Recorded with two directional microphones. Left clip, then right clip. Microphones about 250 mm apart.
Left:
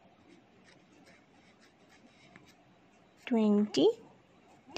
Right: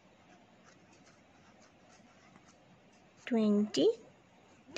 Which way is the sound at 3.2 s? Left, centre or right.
Centre.